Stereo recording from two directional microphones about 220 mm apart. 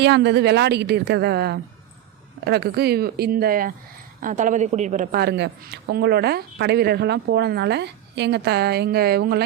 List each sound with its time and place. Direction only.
0.0 s a woman's voice: 50° right (ahead or behind)